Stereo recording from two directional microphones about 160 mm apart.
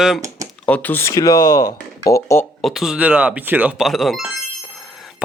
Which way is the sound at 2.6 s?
Centre (ahead or behind).